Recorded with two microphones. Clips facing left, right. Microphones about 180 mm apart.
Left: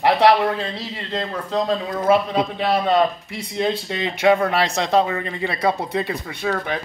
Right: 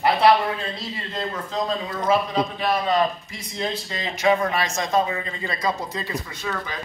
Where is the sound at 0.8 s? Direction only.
70° left (ahead or behind).